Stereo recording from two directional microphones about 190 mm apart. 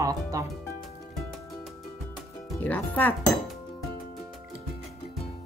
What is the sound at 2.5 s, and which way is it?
Speech, 10° left (ahead or behind).